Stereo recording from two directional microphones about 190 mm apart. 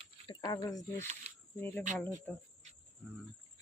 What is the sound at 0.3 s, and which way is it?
Speech, 20° left (ahead or behind).